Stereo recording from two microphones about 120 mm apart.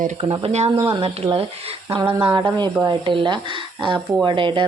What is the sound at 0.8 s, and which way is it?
Speech, 45° right (ahead or behind).